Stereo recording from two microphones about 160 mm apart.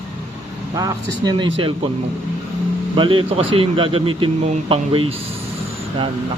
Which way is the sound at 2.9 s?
30° right (ahead or behind).